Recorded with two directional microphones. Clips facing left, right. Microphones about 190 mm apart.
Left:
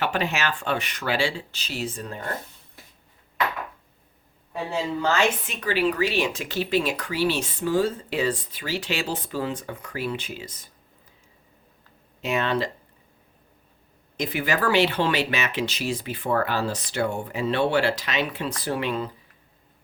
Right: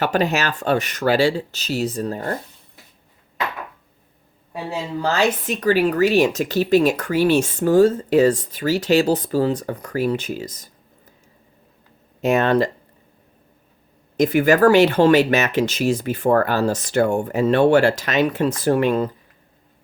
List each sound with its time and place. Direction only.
0.0 s speech: 40° right (ahead or behind)
5.0 s speech: 35° right (ahead or behind)
12.2 s speech: 45° right (ahead or behind)
14.2 s speech: 45° right (ahead or behind)